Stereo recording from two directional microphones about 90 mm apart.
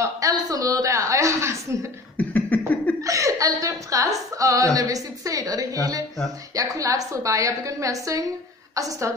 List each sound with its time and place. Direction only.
0.0 s a woman's voice: 40° right (ahead or behind)
2.1 s a sound: 20° left (ahead or behind)
3.0 s a woman's voice: 40° right (ahead or behind)